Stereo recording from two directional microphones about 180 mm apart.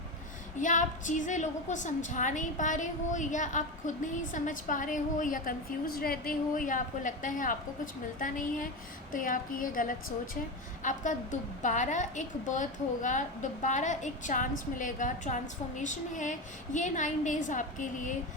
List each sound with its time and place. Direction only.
0.6 s a woman's voice: 45° left (ahead or behind)